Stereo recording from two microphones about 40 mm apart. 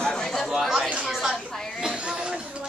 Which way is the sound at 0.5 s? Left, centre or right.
Centre.